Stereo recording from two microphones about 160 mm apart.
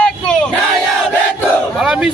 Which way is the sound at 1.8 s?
5° right (ahead or behind).